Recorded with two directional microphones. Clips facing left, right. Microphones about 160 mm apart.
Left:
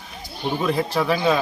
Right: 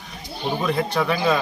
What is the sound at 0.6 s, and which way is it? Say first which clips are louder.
Speech: left 1 dB; centre (ahead or behind).